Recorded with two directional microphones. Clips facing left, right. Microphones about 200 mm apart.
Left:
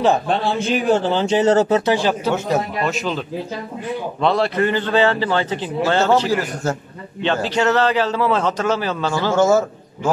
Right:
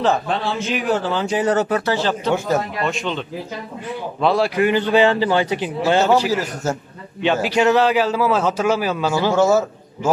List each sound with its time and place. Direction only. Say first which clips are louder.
0.3 s speech: left 3 dB; 30° left (ahead or behind)
2.0 s speech: left 1 dB; 10° left (ahead or behind)
2.3 s a man's voice: even; centre (ahead or behind)